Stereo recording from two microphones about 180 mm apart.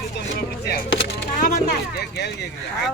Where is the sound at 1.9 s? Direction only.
70° left (ahead or behind).